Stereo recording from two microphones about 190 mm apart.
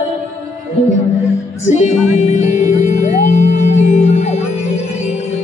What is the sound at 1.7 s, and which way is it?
Music, 40° left (ahead or behind).